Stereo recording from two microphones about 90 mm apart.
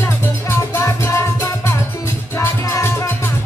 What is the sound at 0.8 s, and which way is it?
Music, 30° left (ahead or behind).